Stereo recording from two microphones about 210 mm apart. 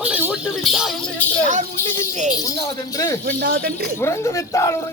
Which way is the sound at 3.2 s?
45° right (ahead or behind).